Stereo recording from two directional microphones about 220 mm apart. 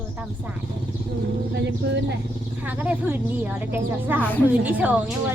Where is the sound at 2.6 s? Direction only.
5° right (ahead or behind).